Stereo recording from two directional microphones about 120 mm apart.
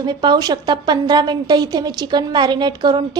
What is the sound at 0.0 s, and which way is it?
A woman's voice, 35° right (ahead or behind).